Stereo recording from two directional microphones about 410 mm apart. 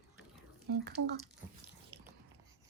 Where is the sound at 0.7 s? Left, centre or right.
Right.